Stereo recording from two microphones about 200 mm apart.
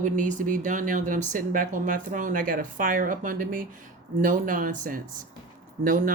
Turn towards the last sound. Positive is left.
turn(degrees=-40)  # may be behind; listen again after turning